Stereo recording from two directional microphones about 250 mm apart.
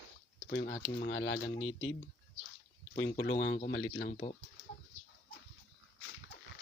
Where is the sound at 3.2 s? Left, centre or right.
Left.